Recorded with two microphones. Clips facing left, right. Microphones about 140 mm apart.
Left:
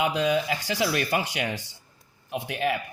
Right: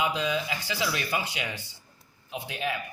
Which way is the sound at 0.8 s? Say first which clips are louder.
Left 4 dB; 80° left.